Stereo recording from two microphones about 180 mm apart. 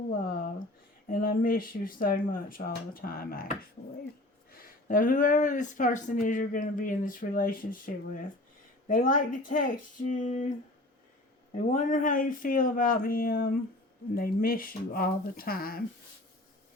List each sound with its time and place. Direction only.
1.0 s speech: 50° left (ahead or behind)
11.5 s speech: 45° left (ahead or behind)